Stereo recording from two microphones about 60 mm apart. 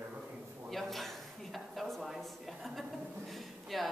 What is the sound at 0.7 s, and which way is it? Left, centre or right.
A woman's voice, centre.